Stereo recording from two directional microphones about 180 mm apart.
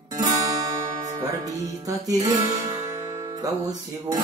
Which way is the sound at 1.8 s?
20° right (ahead or behind).